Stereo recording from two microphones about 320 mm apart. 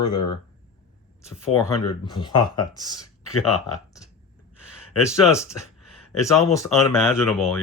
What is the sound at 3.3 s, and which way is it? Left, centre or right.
Speech, left.